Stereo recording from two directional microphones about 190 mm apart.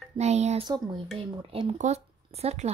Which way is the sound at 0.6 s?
25° right (ahead or behind).